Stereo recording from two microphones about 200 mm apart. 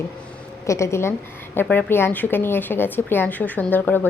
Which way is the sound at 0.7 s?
15° left (ahead or behind).